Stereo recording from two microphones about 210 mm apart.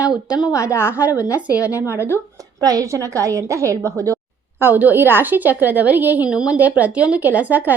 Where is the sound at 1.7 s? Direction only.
15° left (ahead or behind).